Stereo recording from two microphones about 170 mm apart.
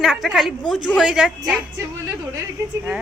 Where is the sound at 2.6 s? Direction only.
20° right (ahead or behind).